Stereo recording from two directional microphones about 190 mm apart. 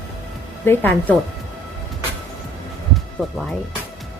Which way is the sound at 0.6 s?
10° left (ahead or behind).